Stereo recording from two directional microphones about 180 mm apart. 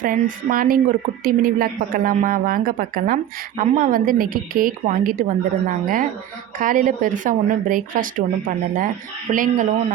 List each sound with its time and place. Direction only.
0.0 s a woman's voice: 50° right (ahead or behind)